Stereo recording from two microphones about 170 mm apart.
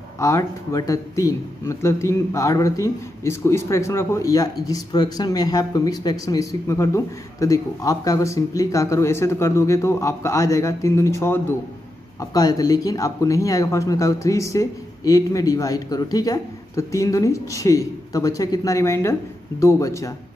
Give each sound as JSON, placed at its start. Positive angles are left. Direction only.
{"t": 0.2, "sound": "speech", "side_deg": 20}